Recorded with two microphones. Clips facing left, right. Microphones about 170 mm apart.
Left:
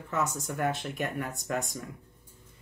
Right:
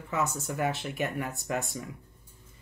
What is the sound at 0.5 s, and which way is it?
Speech, 5° right (ahead or behind).